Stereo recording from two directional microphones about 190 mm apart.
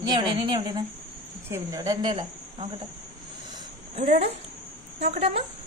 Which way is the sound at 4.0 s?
30° right (ahead or behind).